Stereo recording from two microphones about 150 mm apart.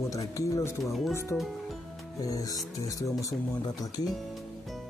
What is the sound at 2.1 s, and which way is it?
Speech, 25° left (ahead or behind).